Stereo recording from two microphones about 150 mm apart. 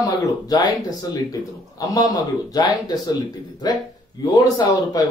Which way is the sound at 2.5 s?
25° left (ahead or behind).